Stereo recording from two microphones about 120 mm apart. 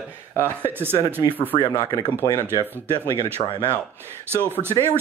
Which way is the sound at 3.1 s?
45° left (ahead or behind).